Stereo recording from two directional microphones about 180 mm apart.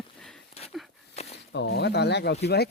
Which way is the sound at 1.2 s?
35° left (ahead or behind).